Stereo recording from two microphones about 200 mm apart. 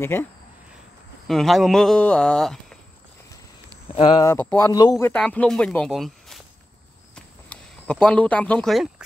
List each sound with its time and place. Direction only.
0.0 s speech: 10° left (ahead or behind)
3.9 s speech: 30° left (ahead or behind)
4.2 s speech: 10° left (ahead or behind)
7.2 s a sound: 5° left (ahead or behind)